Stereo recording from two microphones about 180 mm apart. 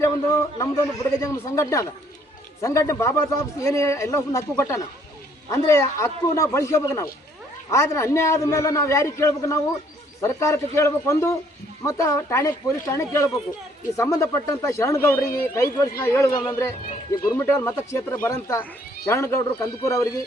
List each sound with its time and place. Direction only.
0.0 s speech: 15° left (ahead or behind)